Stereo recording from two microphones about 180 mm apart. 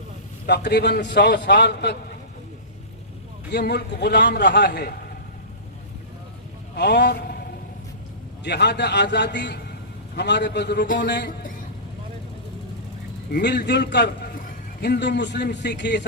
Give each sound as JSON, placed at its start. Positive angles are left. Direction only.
{"t": 0.4, "sound": "a man's voice", "side_deg": 70}
{"t": 3.5, "sound": "a man's voice", "side_deg": 65}
{"t": 6.7, "sound": "a man's voice", "side_deg": 70}
{"t": 8.4, "sound": "a man's voice", "side_deg": 70}
{"t": 13.3, "sound": "a man's voice", "side_deg": 65}